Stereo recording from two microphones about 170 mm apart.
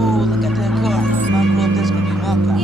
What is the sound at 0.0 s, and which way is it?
Music, centre (ahead or behind).